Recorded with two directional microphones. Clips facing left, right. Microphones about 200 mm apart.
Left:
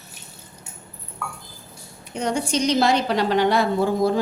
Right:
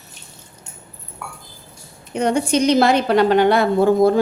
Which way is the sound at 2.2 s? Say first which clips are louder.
Right 6 dB; 60° right (ahead or behind).